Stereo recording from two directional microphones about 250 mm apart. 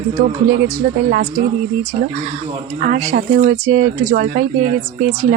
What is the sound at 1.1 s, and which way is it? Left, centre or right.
Speech, right.